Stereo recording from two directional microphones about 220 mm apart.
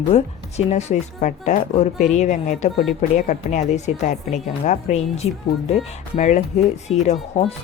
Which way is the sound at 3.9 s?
35° left (ahead or behind).